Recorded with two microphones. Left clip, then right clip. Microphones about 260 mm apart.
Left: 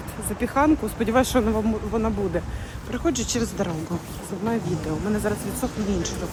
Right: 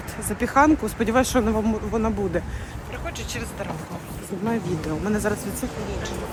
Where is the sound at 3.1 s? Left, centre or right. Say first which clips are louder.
Left 8 dB; left.